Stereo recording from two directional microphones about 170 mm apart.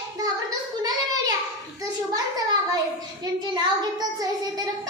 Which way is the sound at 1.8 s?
20° right (ahead or behind).